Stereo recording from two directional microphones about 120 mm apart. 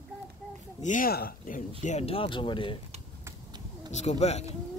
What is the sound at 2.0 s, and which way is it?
Music, 50° left (ahead or behind).